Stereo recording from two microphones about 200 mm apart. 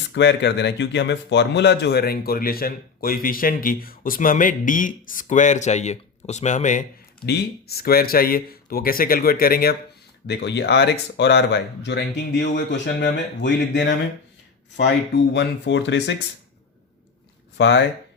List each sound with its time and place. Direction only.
0.1 s speech: 60° left (ahead or behind); by 6.8 s 40° left (ahead or behind)
7.3 s speech: 55° left (ahead or behind)
15.3 s speech: 60° left (ahead or behind)
17.6 s speech: 60° left (ahead or behind)